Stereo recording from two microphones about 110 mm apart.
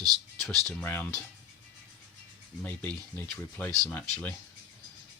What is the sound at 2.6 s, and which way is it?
Speech, 15° left (ahead or behind).